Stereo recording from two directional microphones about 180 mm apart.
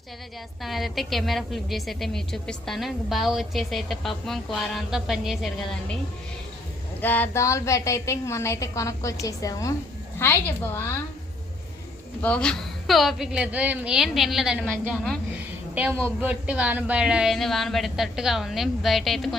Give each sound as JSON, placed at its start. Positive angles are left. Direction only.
{"t": 0.6, "sound": "a woman's voice", "side_deg": 0}
{"t": 7.0, "sound": "a woman's voice", "side_deg": 10}
{"t": 12.2, "sound": "a woman's voice", "side_deg": 5}
{"t": 15.4, "sound": "a sound", "side_deg": -10}
{"t": 16.0, "sound": "a woman's voice", "side_deg": -10}